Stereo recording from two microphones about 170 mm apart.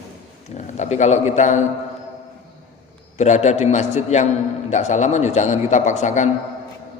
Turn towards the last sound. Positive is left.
turn(degrees=45)  # may be behind; listen again after turning